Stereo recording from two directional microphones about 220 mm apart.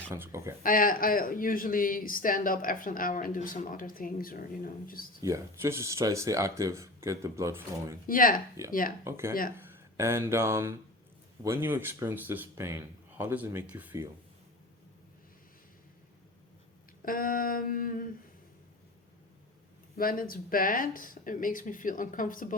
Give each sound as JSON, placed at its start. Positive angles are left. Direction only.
{"t": 0.1, "sound": "speech", "side_deg": -10}
{"t": 0.6, "sound": "a man's voice", "side_deg": 40}
{"t": 5.2, "sound": "speech", "side_deg": -15}
{"t": 8.0, "sound": "a man's voice", "side_deg": 40}
{"t": 8.6, "sound": "speech", "side_deg": -15}
{"t": 17.0, "sound": "a man's voice", "side_deg": 40}
{"t": 20.0, "sound": "a man's voice", "side_deg": 40}